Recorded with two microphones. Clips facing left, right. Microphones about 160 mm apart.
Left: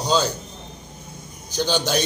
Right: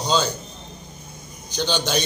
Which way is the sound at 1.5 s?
5° left (ahead or behind).